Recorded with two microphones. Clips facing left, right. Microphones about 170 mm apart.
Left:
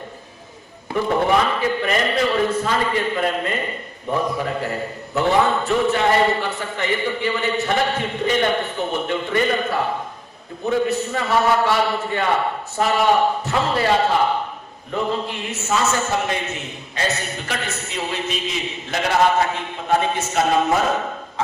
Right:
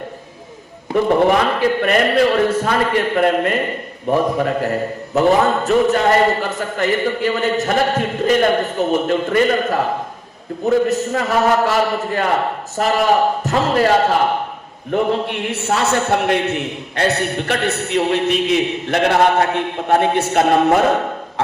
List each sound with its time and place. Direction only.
1.5 s a man's voice: 55° right (ahead or behind)
4.4 s a man's voice: 45° right (ahead or behind)
10.8 s a man's voice: 40° right (ahead or behind)
14.9 s a man's voice: 65° right (ahead or behind)